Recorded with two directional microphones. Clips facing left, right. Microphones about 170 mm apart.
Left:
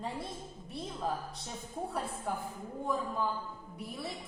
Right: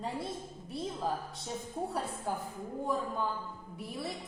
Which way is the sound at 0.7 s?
Centre (ahead or behind).